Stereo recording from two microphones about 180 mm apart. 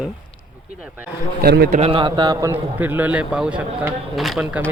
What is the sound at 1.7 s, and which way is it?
A man's voice, 30° right (ahead or behind).